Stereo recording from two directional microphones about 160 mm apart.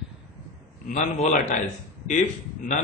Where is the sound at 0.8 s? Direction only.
50° left (ahead or behind).